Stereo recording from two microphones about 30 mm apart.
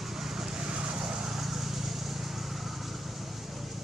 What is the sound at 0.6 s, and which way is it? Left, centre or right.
Vehicle, right.